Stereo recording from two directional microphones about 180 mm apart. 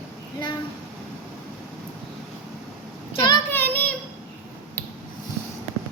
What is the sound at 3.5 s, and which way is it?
Child singing, 10° left (ahead or behind).